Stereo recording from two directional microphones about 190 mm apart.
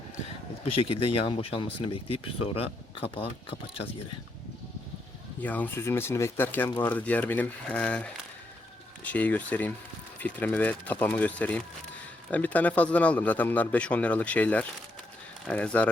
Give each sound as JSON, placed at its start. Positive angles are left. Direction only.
{"t": 0.6, "sound": "speech", "side_deg": 30}
{"t": 5.4, "sound": "speech", "side_deg": 10}